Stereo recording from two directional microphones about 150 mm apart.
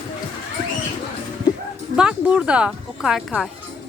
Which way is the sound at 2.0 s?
5° right (ahead or behind).